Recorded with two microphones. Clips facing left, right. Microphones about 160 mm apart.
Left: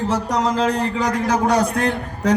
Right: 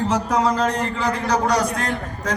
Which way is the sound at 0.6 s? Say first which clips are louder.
Left 2 dB; 35° left (ahead or behind).